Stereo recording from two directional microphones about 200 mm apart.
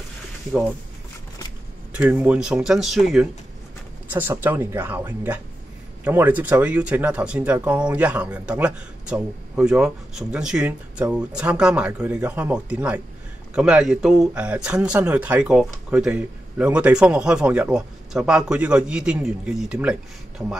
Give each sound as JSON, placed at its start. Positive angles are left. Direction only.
{"t": 0.5, "sound": "speech", "side_deg": 0}
{"t": 1.9, "sound": "speech", "side_deg": -5}